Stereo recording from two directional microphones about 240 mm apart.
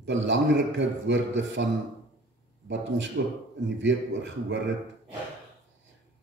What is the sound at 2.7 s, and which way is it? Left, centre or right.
A man's voice, right.